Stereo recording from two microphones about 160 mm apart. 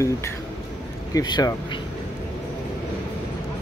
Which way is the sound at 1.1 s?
25° left (ahead or behind).